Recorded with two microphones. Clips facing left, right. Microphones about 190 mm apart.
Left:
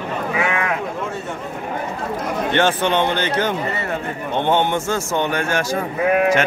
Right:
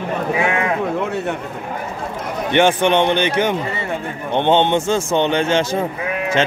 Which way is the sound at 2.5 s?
15° right (ahead or behind).